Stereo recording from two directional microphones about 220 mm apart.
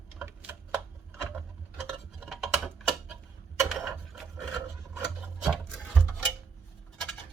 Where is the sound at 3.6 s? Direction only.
Centre (ahead or behind).